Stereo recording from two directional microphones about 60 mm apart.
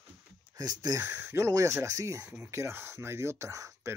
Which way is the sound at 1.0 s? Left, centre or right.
Right.